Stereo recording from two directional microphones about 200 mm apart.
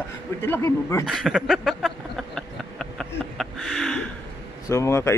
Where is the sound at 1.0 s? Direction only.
5° right (ahead or behind).